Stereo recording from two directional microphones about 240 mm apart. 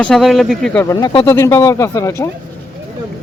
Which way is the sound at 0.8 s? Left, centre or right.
Centre.